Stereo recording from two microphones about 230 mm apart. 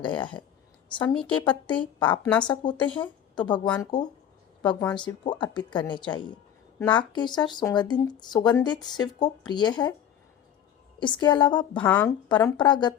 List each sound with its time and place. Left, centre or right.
0.0 s speech: centre
1.0 s a woman's voice: centre
1.3 s a woman's voice: left
5.3 s speech: centre
11.0 s speech: centre
11.8 s speech: centre
12.3 s speech: centre